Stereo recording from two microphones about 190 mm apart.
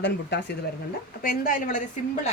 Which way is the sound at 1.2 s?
45° left (ahead or behind).